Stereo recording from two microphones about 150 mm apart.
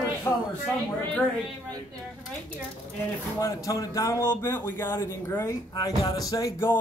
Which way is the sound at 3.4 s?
20° left (ahead or behind).